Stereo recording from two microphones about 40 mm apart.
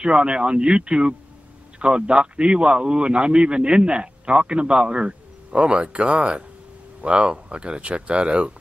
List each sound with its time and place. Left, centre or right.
0.0 s a man's voice: right